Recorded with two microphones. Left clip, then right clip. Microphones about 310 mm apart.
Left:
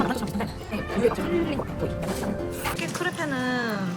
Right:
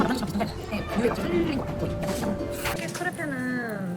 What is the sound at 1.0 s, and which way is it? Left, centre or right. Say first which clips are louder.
Speech: left 3 dB; centre.